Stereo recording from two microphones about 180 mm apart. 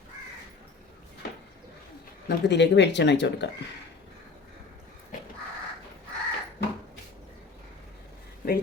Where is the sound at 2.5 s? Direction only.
75° left (ahead or behind).